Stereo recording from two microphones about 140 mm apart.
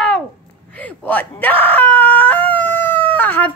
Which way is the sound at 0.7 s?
10° left (ahead or behind).